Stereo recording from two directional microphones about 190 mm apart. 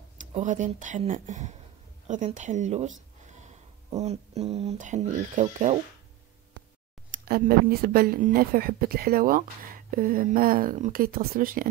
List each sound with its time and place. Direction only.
0.3 s speech: 40° right (ahead or behind)
4.0 s speech: 35° right (ahead or behind)
7.1 s speech: 50° right (ahead or behind)